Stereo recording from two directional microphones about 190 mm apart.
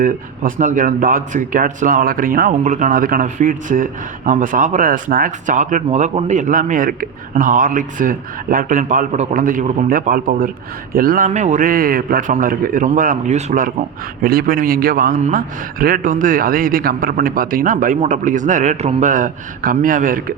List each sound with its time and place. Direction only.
0.0 s speech: 45° right (ahead or behind)